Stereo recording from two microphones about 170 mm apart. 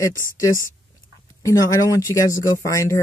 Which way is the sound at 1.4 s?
20° left (ahead or behind).